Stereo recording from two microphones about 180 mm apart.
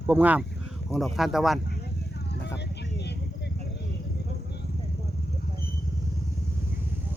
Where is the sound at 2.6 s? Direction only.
70° left (ahead or behind).